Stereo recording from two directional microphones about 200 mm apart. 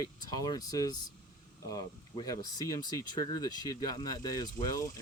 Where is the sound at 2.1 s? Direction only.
20° left (ahead or behind).